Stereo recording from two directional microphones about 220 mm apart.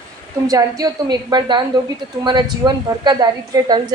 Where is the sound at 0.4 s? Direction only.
15° right (ahead or behind).